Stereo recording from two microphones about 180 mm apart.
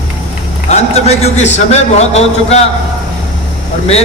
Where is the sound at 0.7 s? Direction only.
35° left (ahead or behind).